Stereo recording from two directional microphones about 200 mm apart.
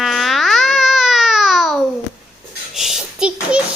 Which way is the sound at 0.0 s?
Centre (ahead or behind).